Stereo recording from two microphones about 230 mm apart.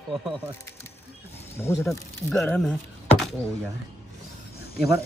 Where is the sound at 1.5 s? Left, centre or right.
Centre.